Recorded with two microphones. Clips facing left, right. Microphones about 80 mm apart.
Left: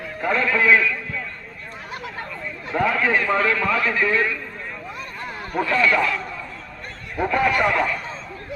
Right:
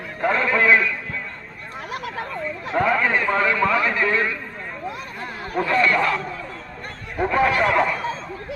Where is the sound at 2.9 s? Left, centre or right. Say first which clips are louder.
Even; centre.